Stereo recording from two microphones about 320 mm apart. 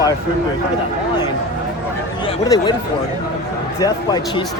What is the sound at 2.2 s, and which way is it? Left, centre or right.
Speech, centre.